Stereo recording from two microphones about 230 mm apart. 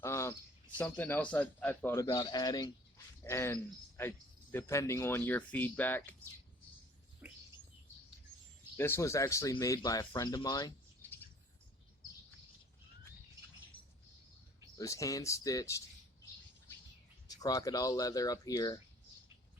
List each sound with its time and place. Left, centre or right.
0.0 s cricket: centre
0.8 s speech: centre
7.2 s bird: centre
8.7 s speech: centre
14.8 s speech: centre
17.2 s speech: centre